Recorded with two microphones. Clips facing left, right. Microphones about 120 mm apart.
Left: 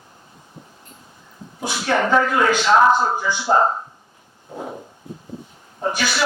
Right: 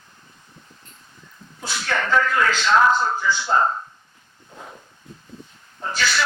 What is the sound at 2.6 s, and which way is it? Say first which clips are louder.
Speech: left 2 dB; 30° left (ahead or behind).